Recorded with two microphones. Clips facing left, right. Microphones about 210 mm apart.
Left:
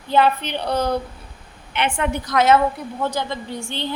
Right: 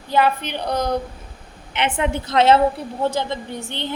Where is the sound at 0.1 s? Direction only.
10° right (ahead or behind).